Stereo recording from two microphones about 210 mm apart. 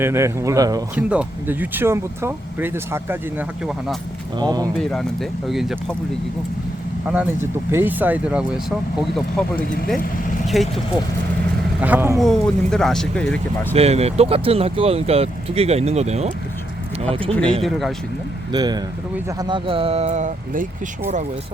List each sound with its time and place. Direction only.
0.0 s speech: 15° right (ahead or behind)
0.9 s speech: 5° right (ahead or behind)
4.4 s speech: 20° right (ahead or behind)
4.8 s speech: centre (ahead or behind)
7.7 s speech: 10° right (ahead or behind)
10.4 s speech: centre (ahead or behind)
12.2 s speech: centre (ahead or behind)
13.7 s speech: 30° right (ahead or behind)
17.6 s speech: centre (ahead or behind)
18.5 s speech: 20° right (ahead or behind); by 20.7 s 35° right (ahead or behind)